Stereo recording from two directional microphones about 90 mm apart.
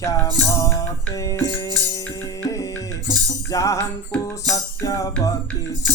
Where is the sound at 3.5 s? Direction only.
35° left (ahead or behind).